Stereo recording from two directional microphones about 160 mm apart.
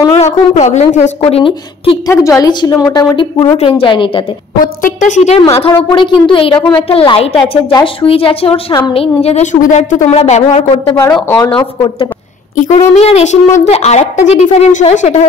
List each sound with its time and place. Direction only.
0.1 s a woman's voice: 45° left (ahead or behind)
2.0 s a woman's voice: 20° left (ahead or behind)
3.5 s a woman's voice: 35° left (ahead or behind)
4.8 s a woman's voice: 50° left (ahead or behind)
5.6 s a woman's voice: 30° left (ahead or behind)
11.2 s a woman's voice: 20° left (ahead or behind)
11.5 s a woman's voice: 30° left (ahead or behind)
12.5 s a woman's voice: 50° left (ahead or behind)